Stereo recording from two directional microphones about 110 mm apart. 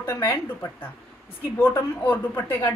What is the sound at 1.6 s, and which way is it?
Speech, 20° left (ahead or behind).